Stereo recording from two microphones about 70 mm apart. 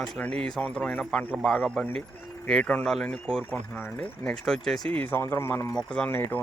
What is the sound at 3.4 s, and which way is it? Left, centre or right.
Speech, left.